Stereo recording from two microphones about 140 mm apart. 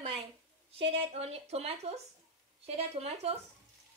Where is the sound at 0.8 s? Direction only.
45° right (ahead or behind).